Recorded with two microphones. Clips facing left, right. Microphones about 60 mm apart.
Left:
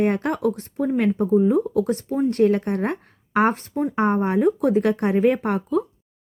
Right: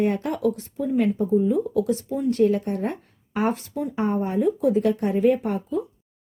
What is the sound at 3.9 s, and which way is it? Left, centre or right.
Speech, left.